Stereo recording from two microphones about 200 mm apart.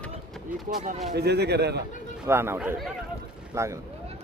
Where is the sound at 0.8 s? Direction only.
40° right (ahead or behind).